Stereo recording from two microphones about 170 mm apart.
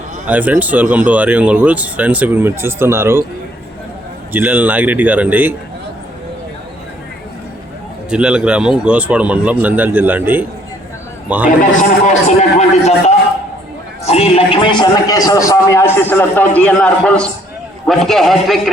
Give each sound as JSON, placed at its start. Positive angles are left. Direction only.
{"t": 0.3, "sound": "speech", "side_deg": -10}
{"t": 4.3, "sound": "speech", "side_deg": -10}
{"t": 8.1, "sound": "speech", "side_deg": -5}
{"t": 11.4, "sound": "speech", "side_deg": 50}
{"t": 14.0, "sound": "a man's voice", "side_deg": 35}